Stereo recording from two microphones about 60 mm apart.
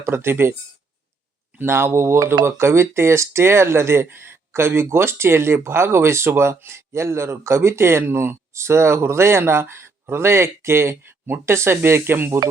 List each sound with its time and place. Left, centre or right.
0.0 s speech: right
1.5 s speech: right